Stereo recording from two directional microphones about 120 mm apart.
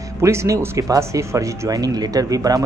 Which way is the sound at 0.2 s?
25° right (ahead or behind).